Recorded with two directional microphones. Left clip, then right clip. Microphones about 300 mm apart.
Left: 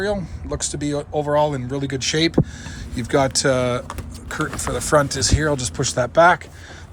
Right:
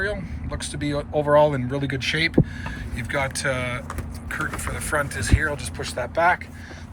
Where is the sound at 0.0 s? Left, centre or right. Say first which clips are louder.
Left 4 dB; centre.